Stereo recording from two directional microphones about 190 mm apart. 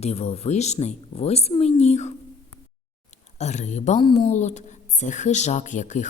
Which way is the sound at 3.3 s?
35° left (ahead or behind).